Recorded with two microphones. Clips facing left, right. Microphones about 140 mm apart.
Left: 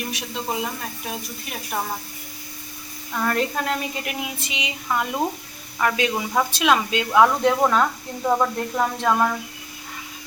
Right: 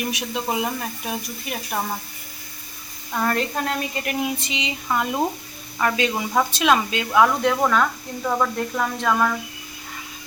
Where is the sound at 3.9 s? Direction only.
5° left (ahead or behind).